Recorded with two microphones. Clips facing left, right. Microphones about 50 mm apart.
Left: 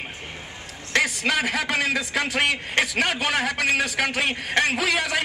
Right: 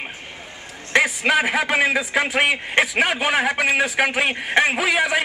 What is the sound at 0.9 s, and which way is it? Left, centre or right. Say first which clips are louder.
A man's voice: right 5 dB; centre.